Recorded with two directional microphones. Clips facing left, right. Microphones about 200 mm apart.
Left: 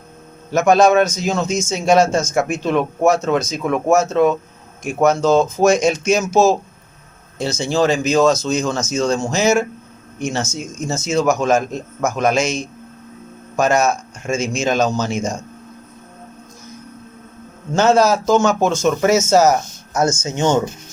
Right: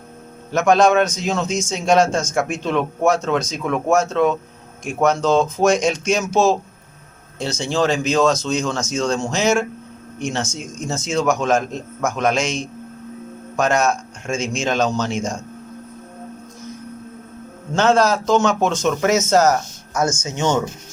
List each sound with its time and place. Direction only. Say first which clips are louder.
0.5 s a man's voice: left 2 dB; 5° left (ahead or behind)
17.7 s a man's voice: left 2 dB; 5° left (ahead or behind)
19.9 s speech: left 3 dB; 30° left (ahead or behind)